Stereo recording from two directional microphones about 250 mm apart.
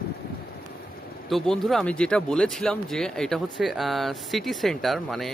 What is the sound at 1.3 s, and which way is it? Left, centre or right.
Speech, centre.